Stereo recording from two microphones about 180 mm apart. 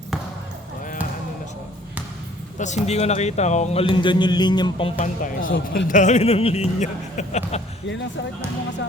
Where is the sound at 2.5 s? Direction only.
40° left (ahead or behind).